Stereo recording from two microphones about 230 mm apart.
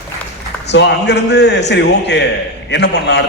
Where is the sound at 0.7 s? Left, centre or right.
Left.